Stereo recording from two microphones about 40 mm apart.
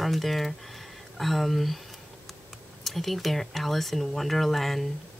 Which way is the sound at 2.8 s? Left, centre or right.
Centre.